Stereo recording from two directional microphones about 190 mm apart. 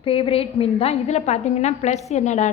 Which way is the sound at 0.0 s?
30° left (ahead or behind).